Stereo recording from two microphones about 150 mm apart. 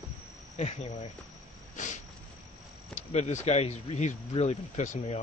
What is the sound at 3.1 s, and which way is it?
Speech, 50° left (ahead or behind).